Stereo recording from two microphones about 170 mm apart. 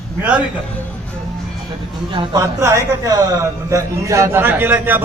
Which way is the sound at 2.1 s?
30° right (ahead or behind).